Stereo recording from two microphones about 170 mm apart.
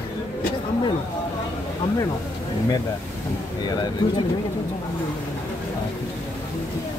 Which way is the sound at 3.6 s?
25° left (ahead or behind).